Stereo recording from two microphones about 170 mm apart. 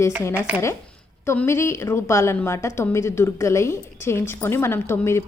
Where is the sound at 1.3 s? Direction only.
15° left (ahead or behind).